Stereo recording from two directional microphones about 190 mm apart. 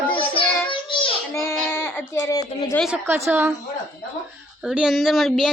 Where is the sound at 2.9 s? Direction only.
10° right (ahead or behind).